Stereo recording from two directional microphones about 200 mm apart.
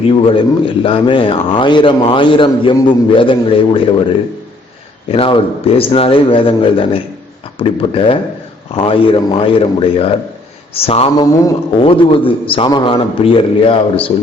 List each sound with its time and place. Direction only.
0.1 s a man's voice: 25° left (ahead or behind)